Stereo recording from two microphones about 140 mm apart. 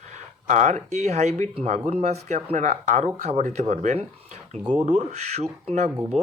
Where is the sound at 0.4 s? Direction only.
60° right (ahead or behind).